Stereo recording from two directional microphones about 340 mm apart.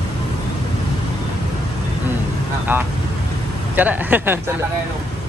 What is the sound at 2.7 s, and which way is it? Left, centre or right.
Vehicle, centre.